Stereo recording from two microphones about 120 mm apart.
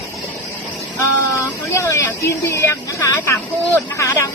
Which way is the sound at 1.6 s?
25° left (ahead or behind).